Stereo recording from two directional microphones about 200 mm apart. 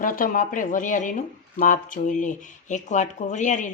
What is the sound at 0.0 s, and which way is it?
Speech, 40° left (ahead or behind).